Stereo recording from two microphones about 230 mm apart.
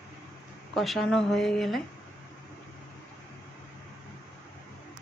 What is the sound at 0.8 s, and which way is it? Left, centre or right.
Speech, centre.